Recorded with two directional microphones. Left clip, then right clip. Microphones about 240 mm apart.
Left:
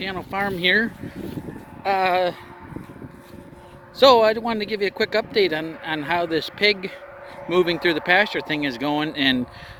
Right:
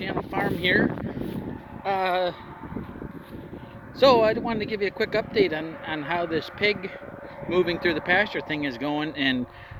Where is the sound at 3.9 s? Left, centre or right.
Left.